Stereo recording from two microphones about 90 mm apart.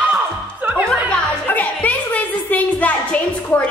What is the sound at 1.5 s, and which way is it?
Music, 20° left (ahead or behind).